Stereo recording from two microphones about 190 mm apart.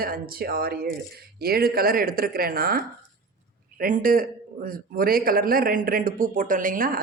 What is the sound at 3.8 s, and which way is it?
Speech, 50° right (ahead or behind).